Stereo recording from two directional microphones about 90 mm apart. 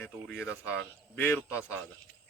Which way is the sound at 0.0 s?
20° left (ahead or behind).